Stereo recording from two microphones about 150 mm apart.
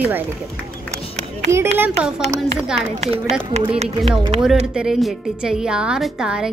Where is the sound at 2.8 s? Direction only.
45° right (ahead or behind).